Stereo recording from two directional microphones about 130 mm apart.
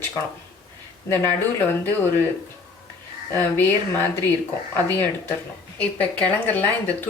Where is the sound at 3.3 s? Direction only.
15° left (ahead or behind).